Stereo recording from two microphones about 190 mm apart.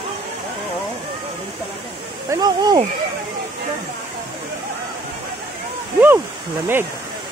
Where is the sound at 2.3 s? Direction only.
20° right (ahead or behind).